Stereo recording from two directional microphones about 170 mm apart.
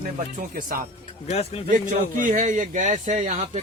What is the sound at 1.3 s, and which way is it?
Speech, 40° left (ahead or behind).